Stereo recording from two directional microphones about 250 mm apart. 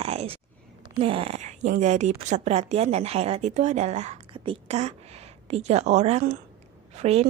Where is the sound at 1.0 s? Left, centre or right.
Right.